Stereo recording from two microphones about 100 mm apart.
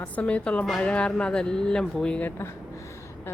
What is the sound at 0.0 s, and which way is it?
Speech, 15° left (ahead or behind).